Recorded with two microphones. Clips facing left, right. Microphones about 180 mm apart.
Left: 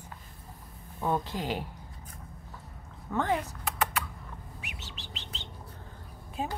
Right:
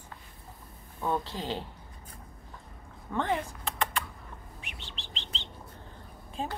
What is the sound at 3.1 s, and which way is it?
Speech, 10° left (ahead or behind).